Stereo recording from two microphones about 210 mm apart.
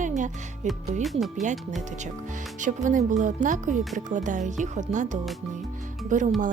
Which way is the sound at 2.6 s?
35° right (ahead or behind).